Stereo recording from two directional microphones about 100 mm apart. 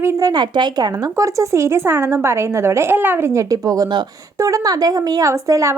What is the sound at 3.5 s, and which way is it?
A woman's voice, 40° right (ahead or behind).